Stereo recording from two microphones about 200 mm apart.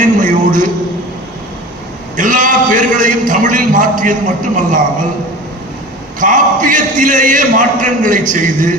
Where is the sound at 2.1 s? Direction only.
40° right (ahead or behind).